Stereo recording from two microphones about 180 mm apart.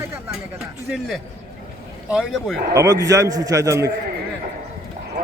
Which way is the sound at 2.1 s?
Centre (ahead or behind).